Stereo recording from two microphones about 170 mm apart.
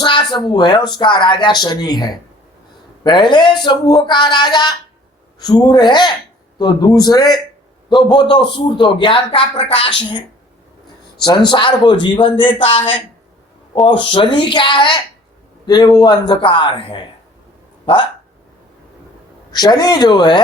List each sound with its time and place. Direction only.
0.0 s a sound: 25° left (ahead or behind)
0.4 s a man's voice: 25° left (ahead or behind)
11.5 s a man's voice: 30° left (ahead or behind)
19.5 s a man's voice: 25° left (ahead or behind)